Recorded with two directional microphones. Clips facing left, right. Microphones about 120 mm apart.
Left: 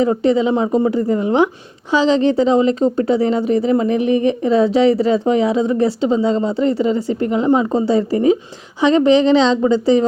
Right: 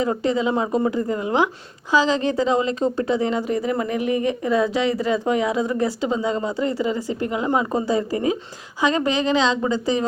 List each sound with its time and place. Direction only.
0.0 s a woman's voice: 30° left (ahead or behind)